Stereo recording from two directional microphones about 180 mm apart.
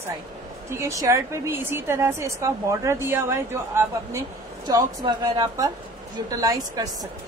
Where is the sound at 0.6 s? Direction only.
15° right (ahead or behind).